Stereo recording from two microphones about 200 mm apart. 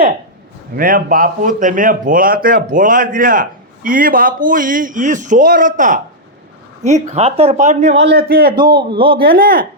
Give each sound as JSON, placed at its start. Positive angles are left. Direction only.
{"t": 0.8, "sound": "a man's voice", "side_deg": -45}
{"t": 8.0, "sound": "a man's voice", "side_deg": -50}
{"t": 8.5, "sound": "a man's voice", "side_deg": -20}
{"t": 9.2, "sound": "a man's voice", "side_deg": -45}